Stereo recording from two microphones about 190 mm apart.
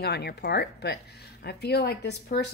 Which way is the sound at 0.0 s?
60° left (ahead or behind).